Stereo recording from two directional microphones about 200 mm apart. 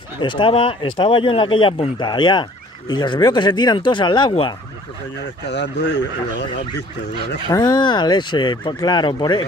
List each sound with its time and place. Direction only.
0.2 s speech: 25° left (ahead or behind)
5.5 s speech: 60° left (ahead or behind)
7.4 s speech: 20° left (ahead or behind)